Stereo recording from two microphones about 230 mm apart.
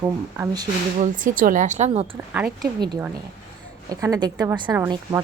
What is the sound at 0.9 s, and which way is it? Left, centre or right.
A woman's voice, right.